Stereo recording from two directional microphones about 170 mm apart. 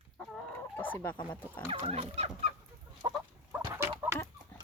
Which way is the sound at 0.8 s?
10° left (ahead or behind).